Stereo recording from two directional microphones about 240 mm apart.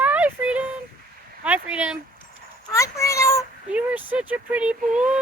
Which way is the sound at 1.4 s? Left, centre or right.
Centre.